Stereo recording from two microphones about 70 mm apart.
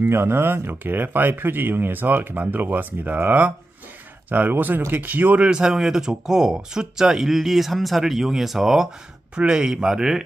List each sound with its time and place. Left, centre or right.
0.0 s speech: right; by 10.2 s centre